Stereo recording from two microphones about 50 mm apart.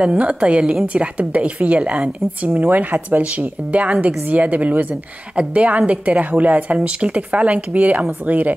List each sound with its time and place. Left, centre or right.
0.0 s a woman's voice: right
2.5 s a woman's voice: right